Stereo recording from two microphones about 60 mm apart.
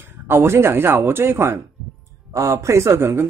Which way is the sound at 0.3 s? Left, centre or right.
Right.